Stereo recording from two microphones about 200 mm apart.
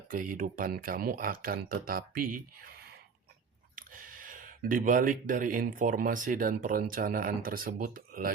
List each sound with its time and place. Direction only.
0.1 s speech: 45° right (ahead or behind)
3.8 s speech: 45° right (ahead or behind)